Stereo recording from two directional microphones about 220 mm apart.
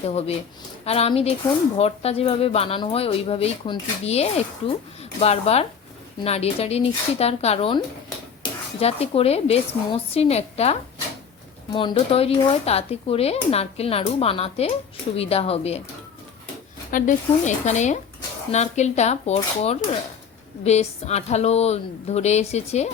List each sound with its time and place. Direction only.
0.0 s speech: 30° left (ahead or behind)
8.8 s speech: 25° left (ahead or behind)
16.9 s speech: 35° left (ahead or behind)